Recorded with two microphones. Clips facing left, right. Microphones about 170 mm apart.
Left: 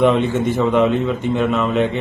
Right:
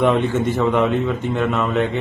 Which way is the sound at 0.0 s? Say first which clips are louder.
Left 2 dB; centre (ahead or behind).